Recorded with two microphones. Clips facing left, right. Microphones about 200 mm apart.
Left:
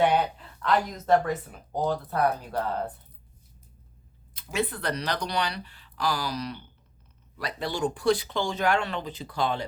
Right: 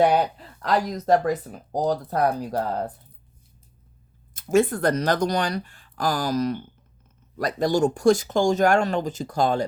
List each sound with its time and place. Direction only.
0.0 s speech: 40° right (ahead or behind)
4.4 s speech: 45° right (ahead or behind)